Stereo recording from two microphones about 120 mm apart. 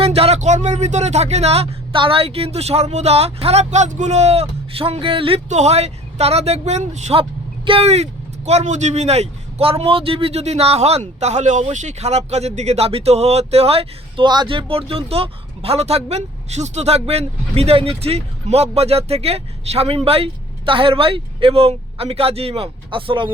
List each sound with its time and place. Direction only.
0.0 s speech: 55° right (ahead or behind)
5.5 s speech: 65° right (ahead or behind)
7.2 s speech: 50° right (ahead or behind)
8.4 s speech: 70° right (ahead or behind); by 14.3 s 55° right (ahead or behind)
14.3 s speech: 40° right (ahead or behind)